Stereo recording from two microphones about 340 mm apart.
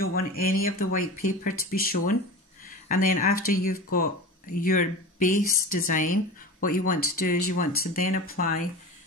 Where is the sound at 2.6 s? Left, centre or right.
Left.